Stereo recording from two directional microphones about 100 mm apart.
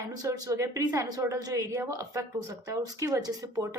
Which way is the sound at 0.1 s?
35° right (ahead or behind).